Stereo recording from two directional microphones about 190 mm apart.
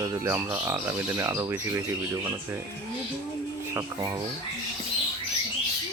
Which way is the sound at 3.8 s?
20° right (ahead or behind).